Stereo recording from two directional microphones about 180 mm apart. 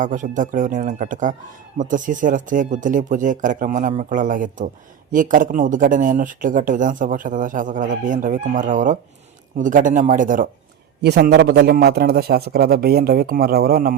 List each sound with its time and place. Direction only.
0.0 s speech: 45° right (ahead or behind)
11.0 s a man's voice: 65° right (ahead or behind)